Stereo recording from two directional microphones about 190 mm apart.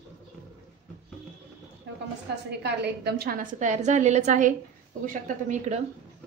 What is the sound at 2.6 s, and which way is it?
A woman's voice, 60° right (ahead or behind).